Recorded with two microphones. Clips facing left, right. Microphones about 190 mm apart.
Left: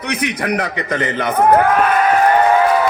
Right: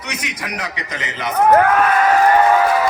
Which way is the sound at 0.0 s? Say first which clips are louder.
Left 8 dB; 60° left (ahead or behind).